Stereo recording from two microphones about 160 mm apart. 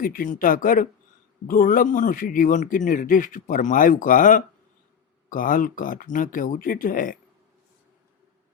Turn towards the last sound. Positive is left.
turn(degrees=60)  # may be behind; listen again after turning